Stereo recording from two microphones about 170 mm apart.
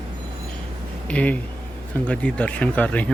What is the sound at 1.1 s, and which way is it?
Speech, 10° left (ahead or behind).